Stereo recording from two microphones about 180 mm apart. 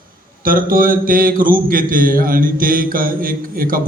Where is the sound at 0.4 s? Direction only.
50° right (ahead or behind).